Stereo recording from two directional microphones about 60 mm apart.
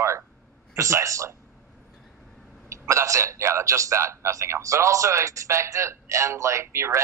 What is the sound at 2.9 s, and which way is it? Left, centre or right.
A man's voice, right.